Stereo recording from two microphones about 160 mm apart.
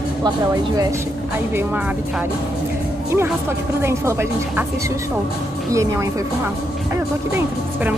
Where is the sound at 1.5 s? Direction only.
10° right (ahead or behind).